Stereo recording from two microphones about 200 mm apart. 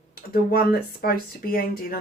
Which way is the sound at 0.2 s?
50° left (ahead or behind).